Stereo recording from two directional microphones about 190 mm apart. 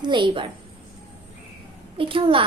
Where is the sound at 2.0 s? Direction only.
30° right (ahead or behind).